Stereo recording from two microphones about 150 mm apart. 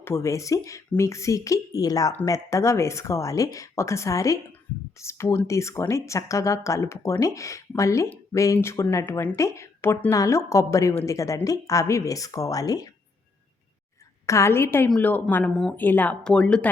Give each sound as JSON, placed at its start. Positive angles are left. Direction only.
{"t": 0.0, "sound": "speech", "side_deg": 15}
{"t": 14.3, "sound": "speech", "side_deg": 20}